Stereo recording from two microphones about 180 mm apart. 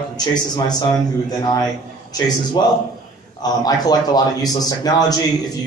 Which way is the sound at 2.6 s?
20° left (ahead or behind).